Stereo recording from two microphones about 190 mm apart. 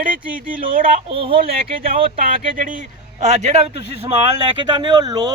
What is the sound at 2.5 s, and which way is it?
Speech, 45° right (ahead or behind).